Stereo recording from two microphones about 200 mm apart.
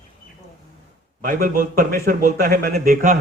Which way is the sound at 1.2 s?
45° right (ahead or behind).